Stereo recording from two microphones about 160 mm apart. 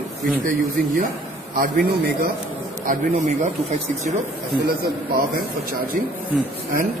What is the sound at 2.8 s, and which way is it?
Speech, 55° right (ahead or behind).